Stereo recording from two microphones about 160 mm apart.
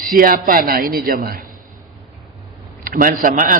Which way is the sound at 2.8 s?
60° right (ahead or behind).